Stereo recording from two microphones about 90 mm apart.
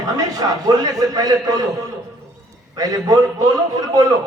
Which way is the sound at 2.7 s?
40° right (ahead or behind).